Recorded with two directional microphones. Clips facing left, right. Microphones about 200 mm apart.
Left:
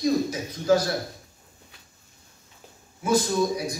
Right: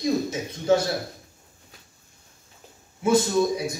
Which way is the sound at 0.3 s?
25° right (ahead or behind).